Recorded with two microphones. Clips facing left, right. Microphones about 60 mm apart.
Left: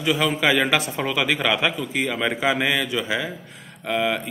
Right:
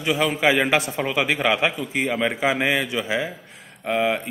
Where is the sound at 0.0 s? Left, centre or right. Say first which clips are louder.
Even; centre.